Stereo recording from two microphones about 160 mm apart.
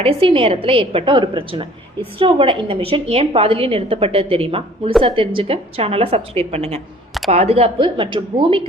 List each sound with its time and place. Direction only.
0.0 s a woman's voice: 35° right (ahead or behind)